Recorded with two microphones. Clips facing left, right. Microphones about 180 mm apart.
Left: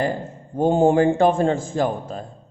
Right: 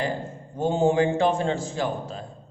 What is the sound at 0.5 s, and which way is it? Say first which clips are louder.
A man's voice: left 5 dB; 50° left (ahead or behind).